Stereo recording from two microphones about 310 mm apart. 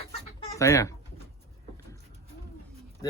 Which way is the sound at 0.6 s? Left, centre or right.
Centre.